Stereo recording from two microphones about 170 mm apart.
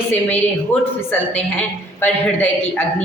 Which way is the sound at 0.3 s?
10° left (ahead or behind).